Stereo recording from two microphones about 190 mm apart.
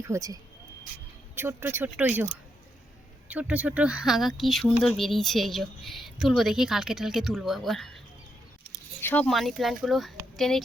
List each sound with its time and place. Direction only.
0.0 s speech: 15° right (ahead or behind)
1.4 s a woman's voice: 10° right (ahead or behind)